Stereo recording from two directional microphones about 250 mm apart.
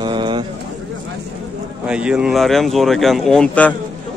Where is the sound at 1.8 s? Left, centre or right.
Centre.